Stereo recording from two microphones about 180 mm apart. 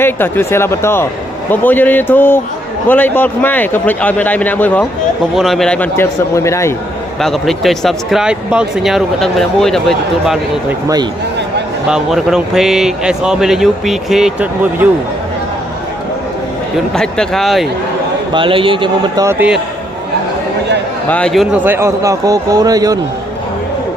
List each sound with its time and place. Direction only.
0.0 s a man's voice: 10° left (ahead or behind)
7.2 s speech: centre (ahead or behind)
11.9 s speech: 5° right (ahead or behind)
16.9 s speech: 5° left (ahead or behind)
18.3 s a man's voice: 30° right (ahead or behind); by 19.5 s 10° right (ahead or behind)
21.1 s speech: 5° left (ahead or behind)
21.5 s a man's voice: 10° right (ahead or behind)